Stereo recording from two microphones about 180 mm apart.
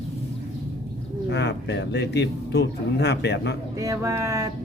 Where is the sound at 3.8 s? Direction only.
15° right (ahead or behind).